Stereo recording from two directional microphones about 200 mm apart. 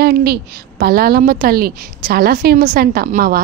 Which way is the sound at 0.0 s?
50° right (ahead or behind).